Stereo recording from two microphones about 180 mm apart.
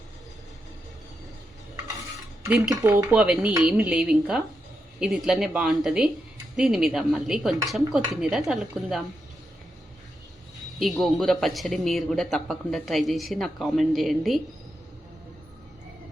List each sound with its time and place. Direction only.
2.6 s speech: 20° right (ahead or behind)
3.1 s speech: 5° right (ahead or behind)
10.8 s speech: centre (ahead or behind)